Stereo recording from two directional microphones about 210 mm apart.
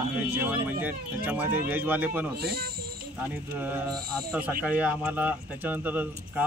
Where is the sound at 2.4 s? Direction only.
45° right (ahead or behind).